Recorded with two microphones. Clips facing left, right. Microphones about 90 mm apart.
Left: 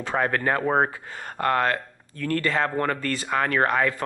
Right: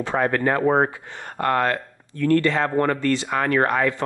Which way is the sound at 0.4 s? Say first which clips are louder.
Right 4 dB; 10° right (ahead or behind).